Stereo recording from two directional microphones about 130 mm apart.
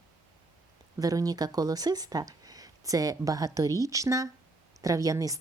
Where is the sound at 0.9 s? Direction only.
30° right (ahead or behind).